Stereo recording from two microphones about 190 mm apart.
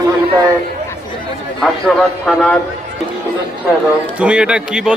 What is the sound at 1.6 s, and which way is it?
Speech, 5° left (ahead or behind).